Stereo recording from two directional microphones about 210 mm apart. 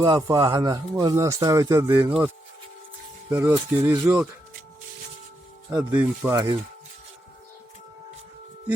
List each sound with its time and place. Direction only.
0.0 s speech: 20° right (ahead or behind)
5.7 s speech: 10° right (ahead or behind)